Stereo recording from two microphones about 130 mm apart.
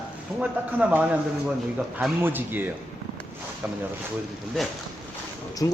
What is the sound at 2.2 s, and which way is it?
Speech, 15° right (ahead or behind).